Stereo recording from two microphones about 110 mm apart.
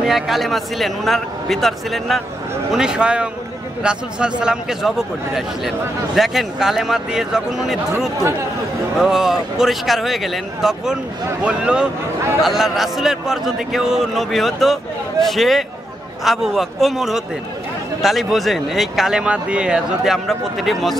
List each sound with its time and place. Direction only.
0.0 s a man's voice: centre (ahead or behind)
8.9 s a man's voice: 5° right (ahead or behind)